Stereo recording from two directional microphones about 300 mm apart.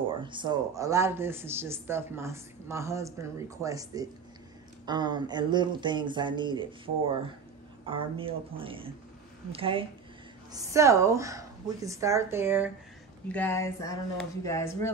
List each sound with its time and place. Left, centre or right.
0.2 s a man's voice: centre
7.8 s a man's voice: centre
13.3 s speech: centre